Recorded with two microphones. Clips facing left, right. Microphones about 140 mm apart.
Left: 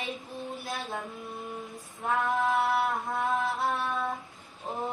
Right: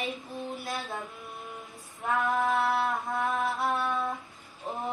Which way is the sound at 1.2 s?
20° left (ahead or behind).